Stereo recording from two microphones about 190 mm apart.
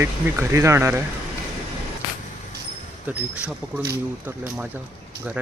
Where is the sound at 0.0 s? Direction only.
15° right (ahead or behind).